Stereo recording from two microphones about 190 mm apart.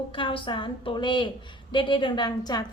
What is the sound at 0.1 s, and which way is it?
A woman's voice, 25° left (ahead or behind).